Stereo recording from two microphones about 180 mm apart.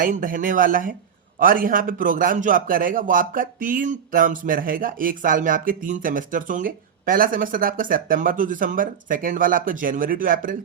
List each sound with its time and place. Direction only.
0.0 s a man's voice: 50° right (ahead or behind)